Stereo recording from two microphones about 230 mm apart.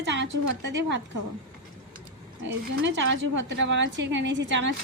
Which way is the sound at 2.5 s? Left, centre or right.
Right.